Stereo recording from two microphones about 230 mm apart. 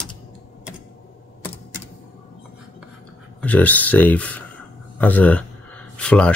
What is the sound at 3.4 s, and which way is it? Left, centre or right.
Speech, centre.